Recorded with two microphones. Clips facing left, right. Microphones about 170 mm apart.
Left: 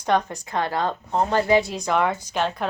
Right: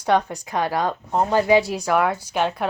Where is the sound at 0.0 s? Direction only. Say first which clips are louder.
Right 2 dB; 10° right (ahead or behind).